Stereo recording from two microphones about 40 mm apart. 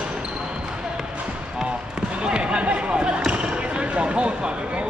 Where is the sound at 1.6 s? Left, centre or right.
Right.